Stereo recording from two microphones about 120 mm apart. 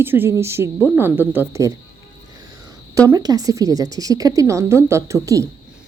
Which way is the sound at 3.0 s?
30° right (ahead or behind).